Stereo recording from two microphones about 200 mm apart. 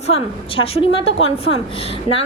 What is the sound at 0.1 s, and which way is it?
A woman's voice, 30° left (ahead or behind).